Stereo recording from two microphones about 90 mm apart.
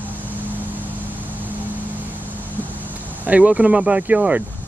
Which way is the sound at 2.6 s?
20° right (ahead or behind).